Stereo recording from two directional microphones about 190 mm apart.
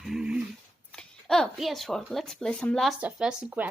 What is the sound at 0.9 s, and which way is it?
Speech, centre (ahead or behind).